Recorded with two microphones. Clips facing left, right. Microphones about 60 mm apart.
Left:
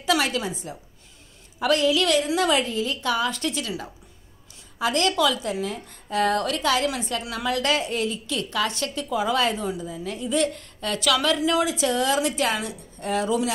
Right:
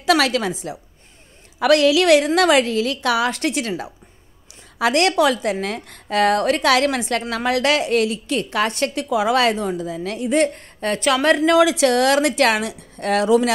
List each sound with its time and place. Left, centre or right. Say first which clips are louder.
0.0 s a woman's voice: right 6 dB; right
4.7 s a woman's voice: right 6 dB; right
10.5 s a woman's voice: right 6 dB; right